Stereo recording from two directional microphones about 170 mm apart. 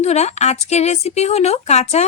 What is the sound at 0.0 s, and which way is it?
A woman's voice, 40° left (ahead or behind).